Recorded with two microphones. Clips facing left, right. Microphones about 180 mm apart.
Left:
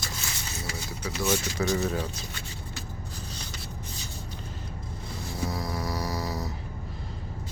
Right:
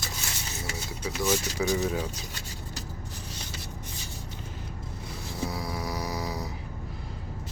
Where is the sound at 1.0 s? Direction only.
Centre (ahead or behind).